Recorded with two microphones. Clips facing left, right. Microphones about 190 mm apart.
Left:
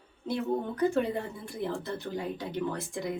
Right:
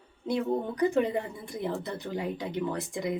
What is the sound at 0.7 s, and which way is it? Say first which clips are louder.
Speech: right 2 dB; 15° right (ahead or behind).